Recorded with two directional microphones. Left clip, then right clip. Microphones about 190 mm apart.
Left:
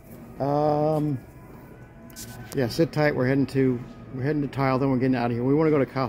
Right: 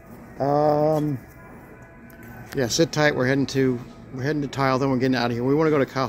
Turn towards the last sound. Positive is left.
turn(degrees=5)  # may be behind; listen again after turning